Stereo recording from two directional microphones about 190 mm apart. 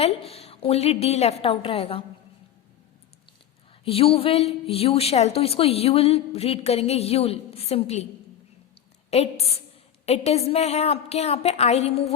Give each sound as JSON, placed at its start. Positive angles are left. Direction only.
{"t": 0.0, "sound": "a woman's voice", "side_deg": 30}
{"t": 3.8, "sound": "a woman's voice", "side_deg": 30}
{"t": 9.0, "sound": "a woman's voice", "side_deg": 35}